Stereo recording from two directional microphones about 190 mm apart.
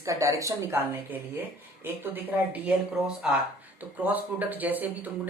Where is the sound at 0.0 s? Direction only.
15° right (ahead or behind).